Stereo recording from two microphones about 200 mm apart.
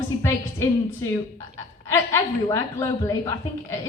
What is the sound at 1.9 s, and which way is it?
A woman's voice, 15° left (ahead or behind).